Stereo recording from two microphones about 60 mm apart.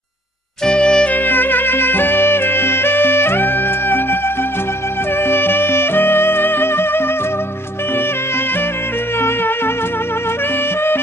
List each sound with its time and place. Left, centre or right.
0.7 s music: centre
1.1 s music: left
5.2 s music: left